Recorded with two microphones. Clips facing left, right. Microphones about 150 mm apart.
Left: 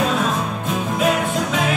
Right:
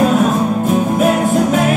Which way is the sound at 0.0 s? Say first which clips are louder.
Right 8 dB; 45° right (ahead or behind).